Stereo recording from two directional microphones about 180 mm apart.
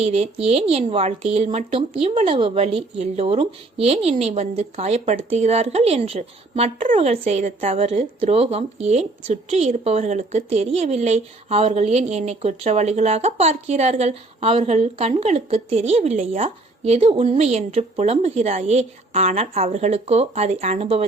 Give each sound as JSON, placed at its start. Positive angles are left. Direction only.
{"t": 0.0, "sound": "a woman's voice", "side_deg": -35}